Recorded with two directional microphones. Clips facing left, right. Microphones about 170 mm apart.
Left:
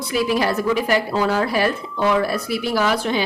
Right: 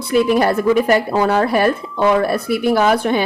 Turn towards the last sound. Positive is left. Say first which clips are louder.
# right 5 dB
turn(degrees=-55)  # may be behind; listen again after turning